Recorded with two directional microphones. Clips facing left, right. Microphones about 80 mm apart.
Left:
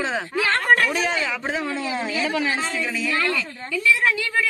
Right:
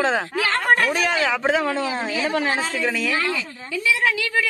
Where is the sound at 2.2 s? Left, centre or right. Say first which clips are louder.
Right 3 dB; right.